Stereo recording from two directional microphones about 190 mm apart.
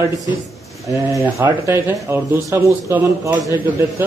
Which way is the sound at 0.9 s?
15° right (ahead or behind).